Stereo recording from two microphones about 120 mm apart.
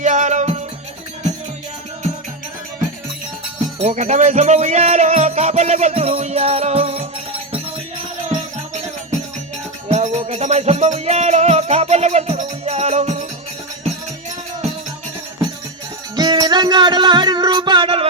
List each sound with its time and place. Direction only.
0.0 s music: 80° right
3.8 s music: 75° right (ahead or behind); by 7.0 s 55° right (ahead or behind)
8.7 s music: 70° right (ahead or behind)
16.1 s music: 35° right (ahead or behind); by 18.1 s 50° right (ahead or behind)